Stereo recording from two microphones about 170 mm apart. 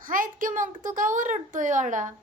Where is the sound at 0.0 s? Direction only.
55° right (ahead or behind).